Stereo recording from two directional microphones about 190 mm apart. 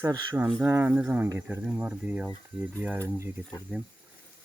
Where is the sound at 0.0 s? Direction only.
20° right (ahead or behind).